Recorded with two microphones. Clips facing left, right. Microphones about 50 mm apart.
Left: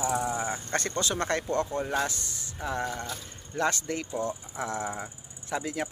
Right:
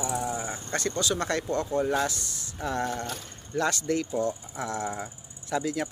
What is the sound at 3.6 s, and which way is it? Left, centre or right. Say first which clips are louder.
Speech: right 2 dB; left.